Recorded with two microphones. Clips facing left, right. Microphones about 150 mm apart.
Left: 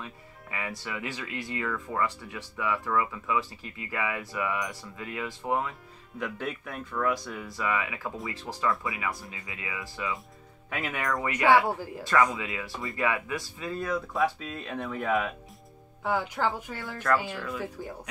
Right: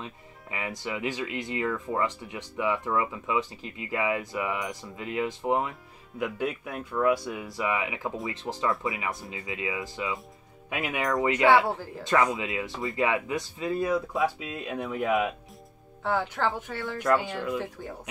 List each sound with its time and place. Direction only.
0.0 s speech: 20° right (ahead or behind)
6.1 s speech: 10° right (ahead or behind)
11.6 s a woman's voice: 10° left (ahead or behind)
12.0 s speech: 15° right (ahead or behind)
16.0 s a woman's voice: 10° left (ahead or behind)